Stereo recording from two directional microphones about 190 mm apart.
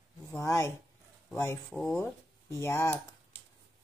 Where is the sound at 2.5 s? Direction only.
15° left (ahead or behind).